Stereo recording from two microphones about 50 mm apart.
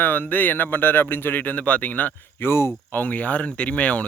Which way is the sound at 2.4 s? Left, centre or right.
Left.